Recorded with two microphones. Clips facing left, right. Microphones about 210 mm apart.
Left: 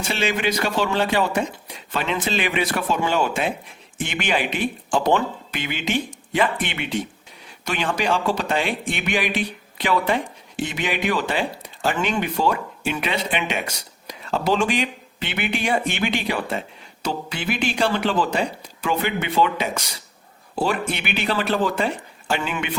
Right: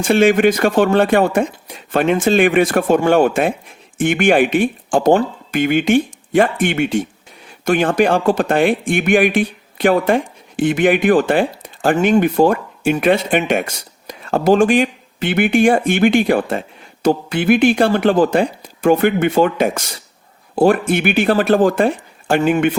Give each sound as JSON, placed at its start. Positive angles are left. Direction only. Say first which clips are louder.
{"t": 0.0, "sound": "speech", "louder": "right 12 dB", "side_deg": -50}